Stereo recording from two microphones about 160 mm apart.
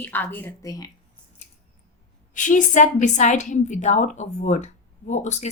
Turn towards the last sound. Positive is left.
turn(degrees=45)  # may be behind; listen again after turning